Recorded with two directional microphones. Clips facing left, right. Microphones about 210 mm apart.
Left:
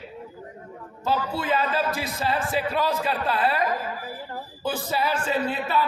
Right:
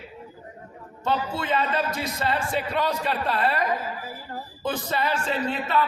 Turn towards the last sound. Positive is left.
turn(degrees=5)  # may be behind; listen again after turning